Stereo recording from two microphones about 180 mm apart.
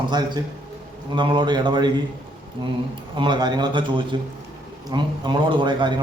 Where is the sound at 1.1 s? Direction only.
25° right (ahead or behind).